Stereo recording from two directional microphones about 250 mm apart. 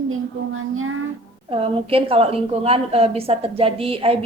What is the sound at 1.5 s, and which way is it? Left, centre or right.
A woman's voice, right.